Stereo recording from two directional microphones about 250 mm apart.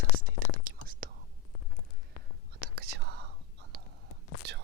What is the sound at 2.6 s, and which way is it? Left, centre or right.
Whispering, right.